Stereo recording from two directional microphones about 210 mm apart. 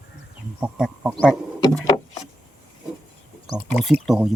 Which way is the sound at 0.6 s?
5° right (ahead or behind).